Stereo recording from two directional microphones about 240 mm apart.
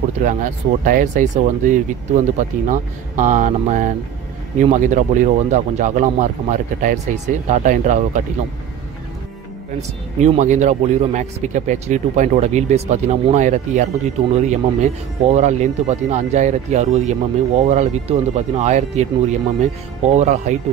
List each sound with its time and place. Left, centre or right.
0.2 s speech: right
9.8 s a man's voice: right